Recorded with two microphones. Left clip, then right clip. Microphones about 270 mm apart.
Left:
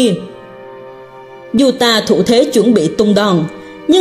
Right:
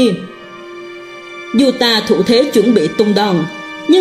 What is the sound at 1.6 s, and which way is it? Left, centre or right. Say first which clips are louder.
Speech: left 1 dB; centre.